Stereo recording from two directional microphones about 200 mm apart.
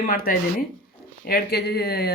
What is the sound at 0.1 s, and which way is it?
Speech, 45° left (ahead or behind).